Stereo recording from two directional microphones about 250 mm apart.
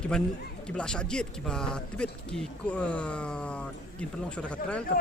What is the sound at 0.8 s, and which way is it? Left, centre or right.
Speech, centre.